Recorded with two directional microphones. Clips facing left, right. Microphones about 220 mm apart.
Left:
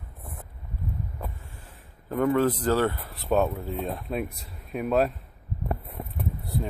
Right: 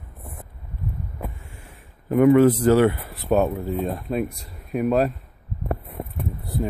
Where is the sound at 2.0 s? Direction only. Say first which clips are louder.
Right 8 dB; 15° right (ahead or behind).